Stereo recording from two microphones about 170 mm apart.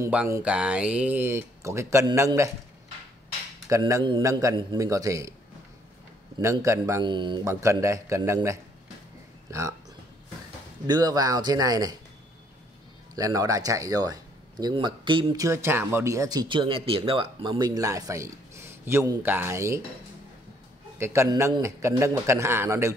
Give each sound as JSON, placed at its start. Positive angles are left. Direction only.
{"t": 0.0, "sound": "speech", "side_deg": -10}
{"t": 3.6, "sound": "speech", "side_deg": -20}
{"t": 6.4, "sound": "speech", "side_deg": -15}
{"t": 10.9, "sound": "speech", "side_deg": -25}
{"t": 13.1, "sound": "speech", "side_deg": -20}
{"t": 15.4, "sound": "speech", "side_deg": -15}
{"t": 21.0, "sound": "speech", "side_deg": -15}